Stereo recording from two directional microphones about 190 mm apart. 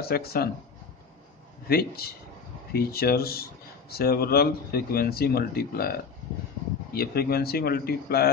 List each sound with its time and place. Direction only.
0.0 s speech: 55° left (ahead or behind)
1.7 s speech: 55° left (ahead or behind)